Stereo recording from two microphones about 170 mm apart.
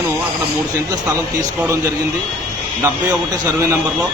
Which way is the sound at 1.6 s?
15° right (ahead or behind).